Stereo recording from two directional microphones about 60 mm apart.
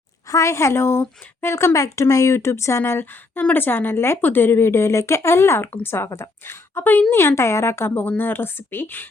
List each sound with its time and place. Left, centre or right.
0.3 s speech: left
1.7 s a woman's voice: left
7.1 s speech: left
7.9 s speech: left